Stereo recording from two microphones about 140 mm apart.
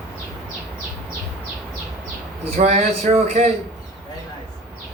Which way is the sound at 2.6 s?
50° right (ahead or behind).